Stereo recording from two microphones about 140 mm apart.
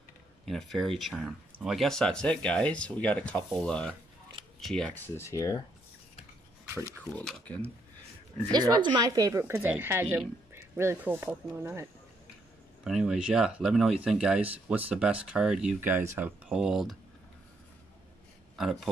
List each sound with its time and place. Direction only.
0.5 s speech: centre (ahead or behind); by 5.6 s 20° left (ahead or behind)
6.7 s a sound: 20° right (ahead or behind)
7.0 s speech: 10° left (ahead or behind)
8.5 s speech: 30° right (ahead or behind)
9.4 s speech: 15° right (ahead or behind)
12.8 s speech: 5° right (ahead or behind)
16.4 s speech: 5° right (ahead or behind)
18.6 s speech: centre (ahead or behind)